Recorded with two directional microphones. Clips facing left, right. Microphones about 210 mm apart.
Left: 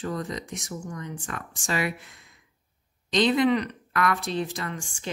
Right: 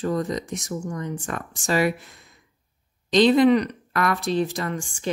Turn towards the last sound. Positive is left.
turn(degrees=-40)  # may be behind; listen again after turning